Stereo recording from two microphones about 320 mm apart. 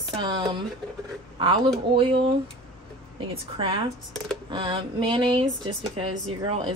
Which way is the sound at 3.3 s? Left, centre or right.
Centre.